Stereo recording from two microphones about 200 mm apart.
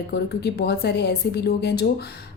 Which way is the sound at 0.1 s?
55° left (ahead or behind).